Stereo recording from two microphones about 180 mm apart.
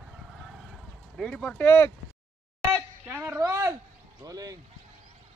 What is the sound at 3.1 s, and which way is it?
A man's voice, 10° right (ahead or behind).